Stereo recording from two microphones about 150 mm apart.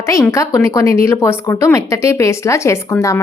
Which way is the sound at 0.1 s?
20° left (ahead or behind).